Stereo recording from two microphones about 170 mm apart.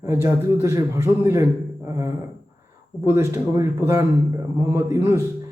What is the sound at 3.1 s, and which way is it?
A man's voice, 15° right (ahead or behind).